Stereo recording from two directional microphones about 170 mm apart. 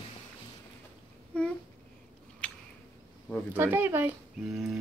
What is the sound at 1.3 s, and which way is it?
Babbling, 5° left (ahead or behind).